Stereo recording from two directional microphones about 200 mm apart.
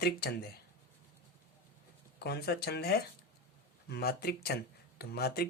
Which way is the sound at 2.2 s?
55° left (ahead or behind).